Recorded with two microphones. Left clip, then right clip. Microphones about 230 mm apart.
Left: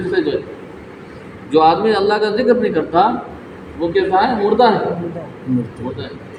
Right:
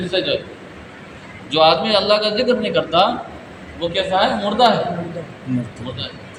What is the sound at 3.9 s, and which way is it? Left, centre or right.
Speech, right.